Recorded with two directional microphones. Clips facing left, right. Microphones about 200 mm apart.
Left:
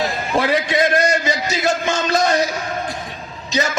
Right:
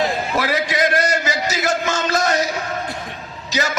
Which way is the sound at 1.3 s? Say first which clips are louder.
Left 1 dB; 25° left (ahead or behind).